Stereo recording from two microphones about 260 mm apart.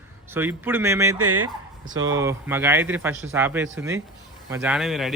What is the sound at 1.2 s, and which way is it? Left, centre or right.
Speech, right.